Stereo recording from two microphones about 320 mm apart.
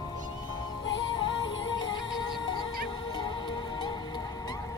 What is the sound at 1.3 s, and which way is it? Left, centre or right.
Music, left.